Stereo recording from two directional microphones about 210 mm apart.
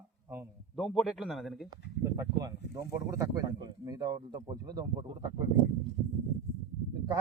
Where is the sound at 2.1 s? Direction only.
15° right (ahead or behind).